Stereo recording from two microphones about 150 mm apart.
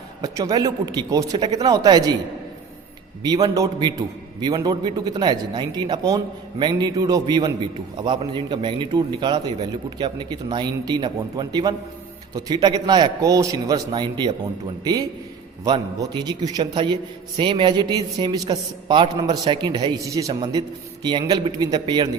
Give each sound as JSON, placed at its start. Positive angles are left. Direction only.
{"t": 0.2, "sound": "a man's voice", "side_deg": -25}
{"t": 3.2, "sound": "a man's voice", "side_deg": -25}
{"t": 15.6, "sound": "a man's voice", "side_deg": -30}